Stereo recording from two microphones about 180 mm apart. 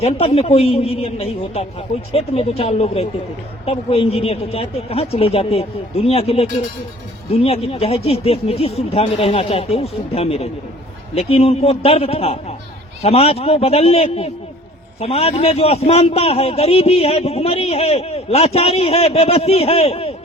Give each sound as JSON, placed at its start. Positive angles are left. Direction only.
{"t": 0.0, "sound": "a man's voice", "side_deg": 35}